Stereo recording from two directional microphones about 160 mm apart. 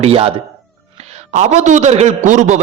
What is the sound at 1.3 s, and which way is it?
A man's voice, 45° right (ahead or behind).